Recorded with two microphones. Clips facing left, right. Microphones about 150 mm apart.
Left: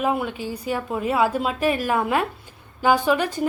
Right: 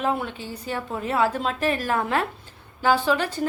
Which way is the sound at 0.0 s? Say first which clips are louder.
Left 2 dB; 10° left (ahead or behind).